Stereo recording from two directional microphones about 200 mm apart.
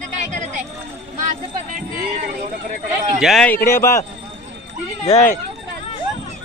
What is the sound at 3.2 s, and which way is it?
Speech, centre (ahead or behind).